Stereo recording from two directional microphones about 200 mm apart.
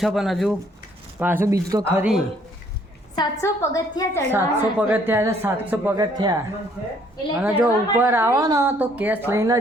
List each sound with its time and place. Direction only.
0.0 s a woman's voice: centre (ahead or behind)
3.2 s a woman's voice: 15° left (ahead or behind)
4.3 s a woman's voice: 10° right (ahead or behind)
7.4 s a woman's voice: 10° right (ahead or behind)